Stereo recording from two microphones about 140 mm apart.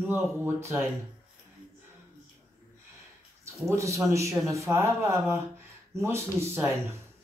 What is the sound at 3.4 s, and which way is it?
Speech, 20° right (ahead or behind).